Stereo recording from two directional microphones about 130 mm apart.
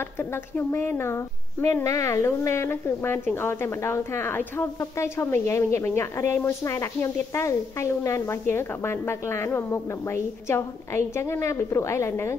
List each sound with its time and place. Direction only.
0.2 s speech: 20° left (ahead or behind)